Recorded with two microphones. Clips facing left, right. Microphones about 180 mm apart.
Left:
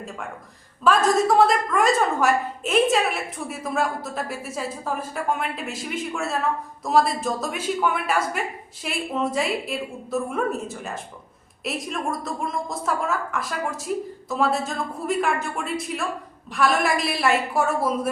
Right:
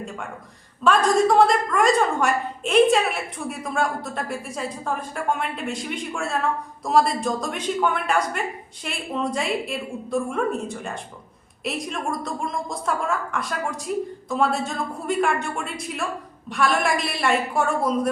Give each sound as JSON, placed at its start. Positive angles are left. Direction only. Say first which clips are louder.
{"t": 0.9, "sound": "a woman's voice", "louder": "right 1 dB", "side_deg": 0}